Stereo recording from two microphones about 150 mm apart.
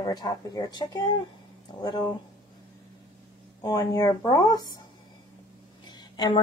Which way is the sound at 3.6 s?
25° left (ahead or behind).